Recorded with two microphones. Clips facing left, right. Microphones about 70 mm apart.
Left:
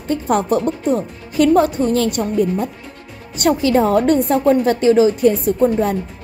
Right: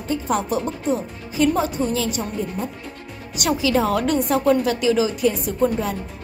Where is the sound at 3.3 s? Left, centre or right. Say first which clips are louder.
Left 5 dB; left.